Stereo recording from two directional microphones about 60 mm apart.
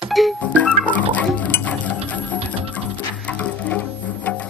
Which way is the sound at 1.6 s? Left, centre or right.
Left.